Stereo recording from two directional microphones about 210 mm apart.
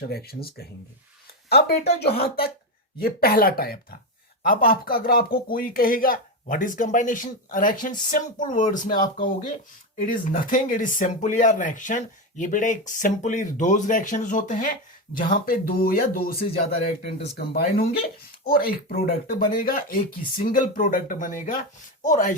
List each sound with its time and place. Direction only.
0.1 s speech: 45° left (ahead or behind)